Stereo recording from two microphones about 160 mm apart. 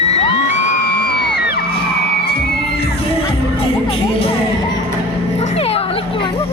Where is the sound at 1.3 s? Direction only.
90° left.